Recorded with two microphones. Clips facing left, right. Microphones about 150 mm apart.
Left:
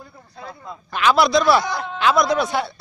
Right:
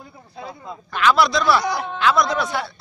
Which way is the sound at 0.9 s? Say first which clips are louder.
Left 2 dB; 15° left (ahead or behind).